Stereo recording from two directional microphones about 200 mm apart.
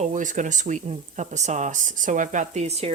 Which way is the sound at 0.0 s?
40° right (ahead or behind).